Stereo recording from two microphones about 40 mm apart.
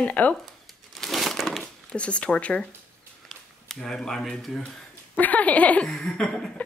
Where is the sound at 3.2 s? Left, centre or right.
Centre.